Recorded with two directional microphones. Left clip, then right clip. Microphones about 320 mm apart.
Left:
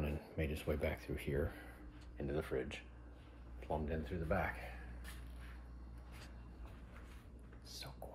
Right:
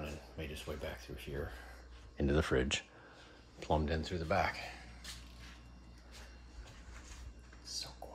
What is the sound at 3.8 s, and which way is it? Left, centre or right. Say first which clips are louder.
Speech: right 5 dB; right.